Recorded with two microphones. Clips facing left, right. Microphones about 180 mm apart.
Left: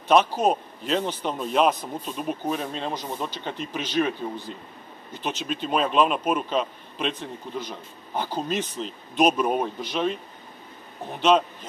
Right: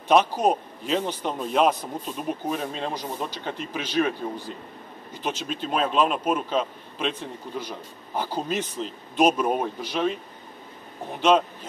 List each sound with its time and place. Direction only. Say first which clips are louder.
0.1 s a man's voice: even; centre (ahead or behind)
5.2 s a man's voice: even; centre (ahead or behind)
11.1 s a man's voice: even; 5° right (ahead or behind)